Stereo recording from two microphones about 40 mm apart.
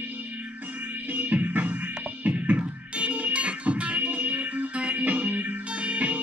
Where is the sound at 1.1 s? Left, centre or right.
Right.